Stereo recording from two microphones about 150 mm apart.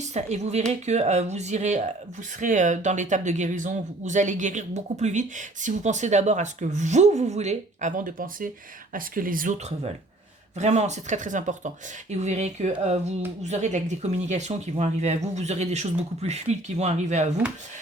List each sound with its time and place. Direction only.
0.1 s speech: 50° right (ahead or behind); by 9.6 s 70° right (ahead or behind)
10.6 s speech: 50° right (ahead or behind)